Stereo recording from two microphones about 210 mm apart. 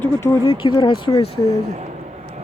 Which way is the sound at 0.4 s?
25° left (ahead or behind).